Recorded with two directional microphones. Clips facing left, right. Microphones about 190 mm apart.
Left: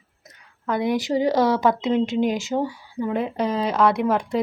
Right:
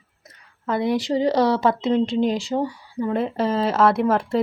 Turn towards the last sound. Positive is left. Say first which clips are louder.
# right 2 dB
turn(degrees=0)  # may be behind; listen again after turning